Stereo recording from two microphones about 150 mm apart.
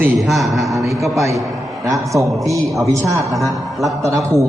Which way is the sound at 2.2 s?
20° right (ahead or behind).